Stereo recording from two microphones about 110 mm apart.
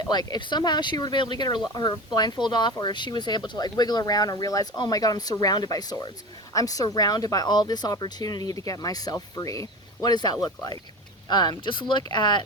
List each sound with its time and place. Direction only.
0.0 s speech: 40° left (ahead or behind)